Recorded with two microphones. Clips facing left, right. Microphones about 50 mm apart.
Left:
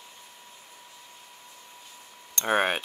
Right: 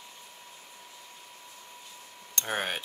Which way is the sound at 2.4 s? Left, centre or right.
Left.